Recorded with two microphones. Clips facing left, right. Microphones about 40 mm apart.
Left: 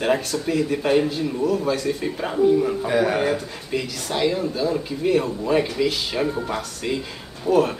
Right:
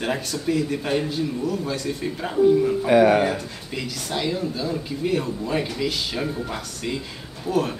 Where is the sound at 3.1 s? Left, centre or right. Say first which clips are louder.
Even; centre.